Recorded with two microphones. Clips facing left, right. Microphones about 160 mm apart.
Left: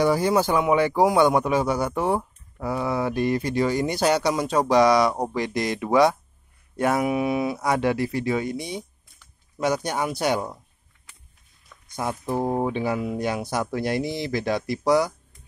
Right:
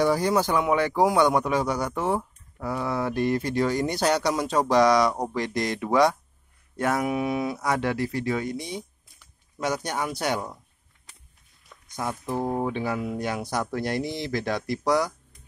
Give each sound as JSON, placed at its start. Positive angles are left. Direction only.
{"t": 0.0, "sound": "a man's voice", "side_deg": 5}
{"t": 12.0, "sound": "speech", "side_deg": 15}